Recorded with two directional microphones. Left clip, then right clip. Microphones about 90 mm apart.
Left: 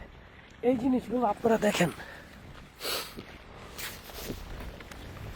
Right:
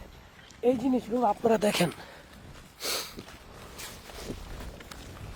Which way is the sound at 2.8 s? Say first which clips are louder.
Right 1 dB; 20° right (ahead or behind).